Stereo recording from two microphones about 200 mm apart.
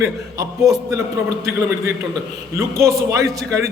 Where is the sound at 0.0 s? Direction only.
15° right (ahead or behind).